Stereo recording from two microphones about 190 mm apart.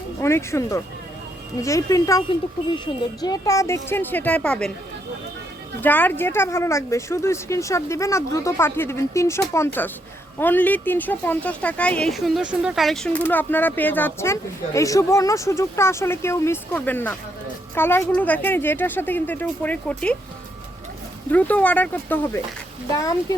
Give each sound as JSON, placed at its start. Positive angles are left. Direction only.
{"t": 0.2, "sound": "speech", "side_deg": 15}
{"t": 5.8, "sound": "speech", "side_deg": 10}
{"t": 21.2, "sound": "speech", "side_deg": 10}